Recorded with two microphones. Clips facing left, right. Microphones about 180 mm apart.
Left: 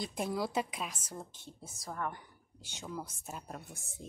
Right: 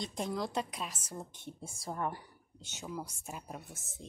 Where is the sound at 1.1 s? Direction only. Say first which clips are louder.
Right 2 dB; 20° right (ahead or behind).